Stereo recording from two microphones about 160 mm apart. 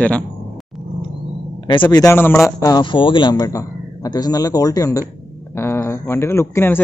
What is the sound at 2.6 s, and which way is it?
A man's voice, 25° left (ahead or behind).